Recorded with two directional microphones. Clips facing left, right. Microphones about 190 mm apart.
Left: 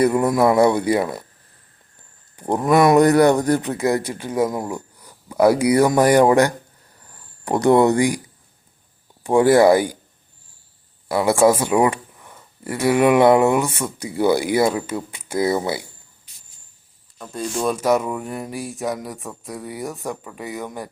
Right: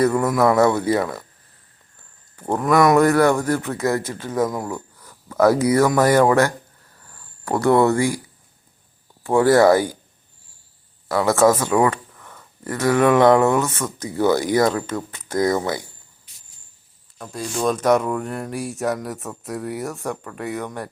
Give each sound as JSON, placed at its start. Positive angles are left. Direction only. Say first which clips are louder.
{"t": 0.0, "sound": "speech", "louder": "left 1 dB", "side_deg": 15}
{"t": 2.3, "sound": "speech", "louder": "left 1 dB", "side_deg": 15}
{"t": 9.2, "sound": "speech", "louder": "left 1 dB", "side_deg": 15}
{"t": 11.1, "sound": "speech", "louder": "left 1 dB", "side_deg": 15}
{"t": 17.2, "sound": "speech", "louder": "left 1 dB", "side_deg": 0}